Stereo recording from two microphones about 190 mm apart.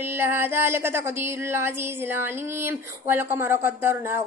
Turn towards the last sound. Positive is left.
turn(degrees=-15)  # may be behind; listen again after turning